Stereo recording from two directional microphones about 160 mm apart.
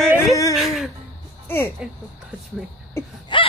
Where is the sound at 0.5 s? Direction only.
Centre (ahead or behind).